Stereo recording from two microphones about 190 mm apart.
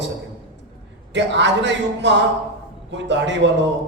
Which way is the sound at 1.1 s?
70° right (ahead or behind).